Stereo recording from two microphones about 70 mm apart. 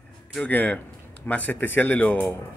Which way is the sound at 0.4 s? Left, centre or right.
Left.